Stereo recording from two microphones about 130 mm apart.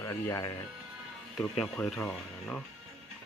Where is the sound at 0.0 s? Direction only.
25° left (ahead or behind).